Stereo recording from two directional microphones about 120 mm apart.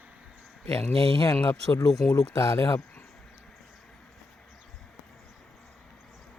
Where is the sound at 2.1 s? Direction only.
25° left (ahead or behind).